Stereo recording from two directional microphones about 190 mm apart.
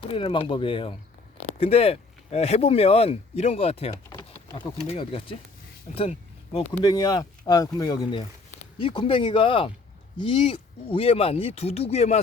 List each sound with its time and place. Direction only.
0.1 s speech: 25° left (ahead or behind)
4.1 s a sound: 15° left (ahead or behind)
4.5 s speech: 30° left (ahead or behind)
6.8 s speech: 20° left (ahead or behind)